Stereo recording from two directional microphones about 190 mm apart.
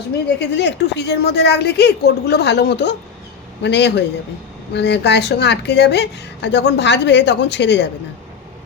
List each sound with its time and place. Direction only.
0.3 s a woman's voice: 65° left (ahead or behind)